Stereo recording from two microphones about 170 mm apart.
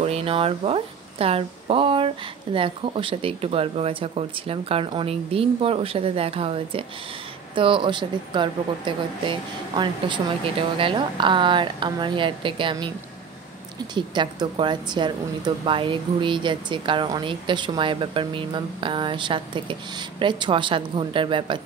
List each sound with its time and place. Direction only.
0.0 s a woman's voice: 35° right (ahead or behind)
13.9 s a woman's voice: 25° right (ahead or behind)